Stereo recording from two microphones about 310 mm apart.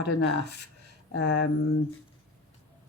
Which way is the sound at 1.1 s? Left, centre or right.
Left.